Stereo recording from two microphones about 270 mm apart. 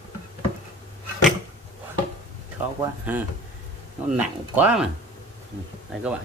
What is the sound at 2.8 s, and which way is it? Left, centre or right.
A man's voice, centre.